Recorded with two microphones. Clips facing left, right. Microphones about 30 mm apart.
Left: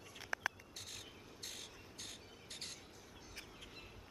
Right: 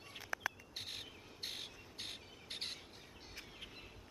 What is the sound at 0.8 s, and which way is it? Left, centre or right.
Cricket, right.